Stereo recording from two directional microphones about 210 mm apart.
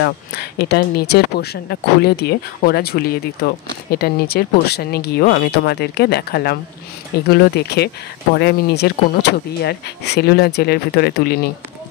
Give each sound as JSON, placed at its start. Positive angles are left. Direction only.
{"t": 0.0, "sound": "speech", "side_deg": 50}